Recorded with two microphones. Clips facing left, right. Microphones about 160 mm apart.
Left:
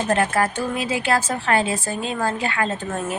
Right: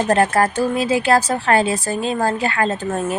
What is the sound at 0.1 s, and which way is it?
A woman's voice, 40° right (ahead or behind).